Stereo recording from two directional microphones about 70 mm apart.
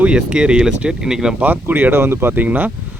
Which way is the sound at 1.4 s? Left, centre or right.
Right.